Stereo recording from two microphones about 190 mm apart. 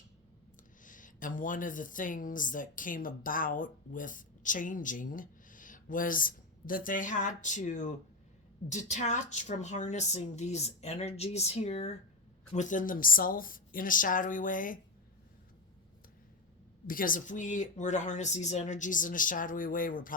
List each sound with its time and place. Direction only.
0.9 s a woman's voice: 45° left (ahead or behind)
16.8 s speech: 45° left (ahead or behind)